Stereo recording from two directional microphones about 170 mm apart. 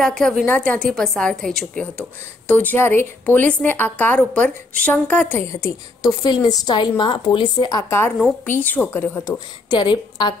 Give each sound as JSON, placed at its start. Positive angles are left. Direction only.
{"t": 0.0, "sound": "a woman's voice", "side_deg": 5}